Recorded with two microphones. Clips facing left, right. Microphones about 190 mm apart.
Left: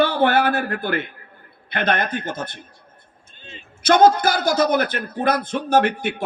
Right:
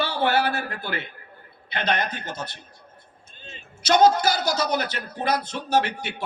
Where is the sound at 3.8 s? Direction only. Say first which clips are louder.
Left 3 dB; 50° left (ahead or behind).